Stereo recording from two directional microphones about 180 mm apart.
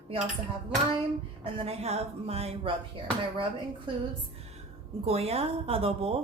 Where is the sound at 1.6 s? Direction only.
35° right (ahead or behind).